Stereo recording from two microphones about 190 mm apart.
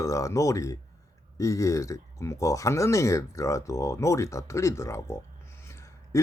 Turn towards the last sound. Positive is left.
turn(degrees=15)  # may be behind; listen again after turning